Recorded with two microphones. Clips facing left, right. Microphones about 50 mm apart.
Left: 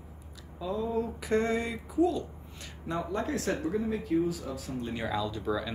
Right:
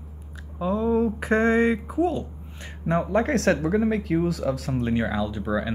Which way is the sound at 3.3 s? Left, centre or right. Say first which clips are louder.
Right 9 dB; right.